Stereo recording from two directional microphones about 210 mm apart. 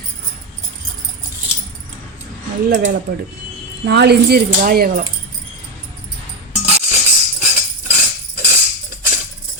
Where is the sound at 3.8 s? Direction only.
50° right (ahead or behind).